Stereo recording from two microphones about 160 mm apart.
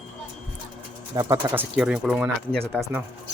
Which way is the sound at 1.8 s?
5° right (ahead or behind).